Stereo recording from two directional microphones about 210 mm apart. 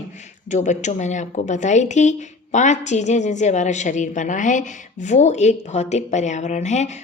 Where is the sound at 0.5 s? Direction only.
35° left (ahead or behind).